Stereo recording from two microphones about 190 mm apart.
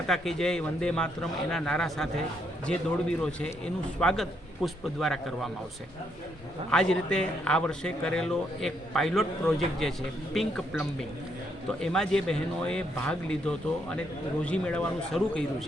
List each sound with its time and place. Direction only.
0.1 s speech: centre (ahead or behind)
6.7 s speech: 5° left (ahead or behind)